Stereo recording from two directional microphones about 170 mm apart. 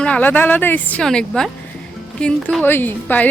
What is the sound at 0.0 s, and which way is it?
A woman's voice, 10° left (ahead or behind).